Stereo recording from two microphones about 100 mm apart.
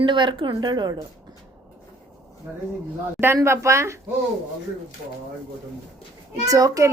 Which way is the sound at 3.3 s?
25° right (ahead or behind).